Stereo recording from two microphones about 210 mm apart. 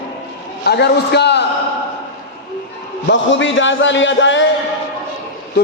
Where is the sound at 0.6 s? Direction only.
50° left (ahead or behind).